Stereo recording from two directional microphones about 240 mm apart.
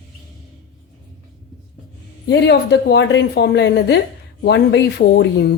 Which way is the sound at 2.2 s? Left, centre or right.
Left.